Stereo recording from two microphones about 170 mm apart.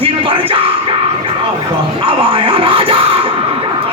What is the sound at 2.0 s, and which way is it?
Speech, 30° right (ahead or behind).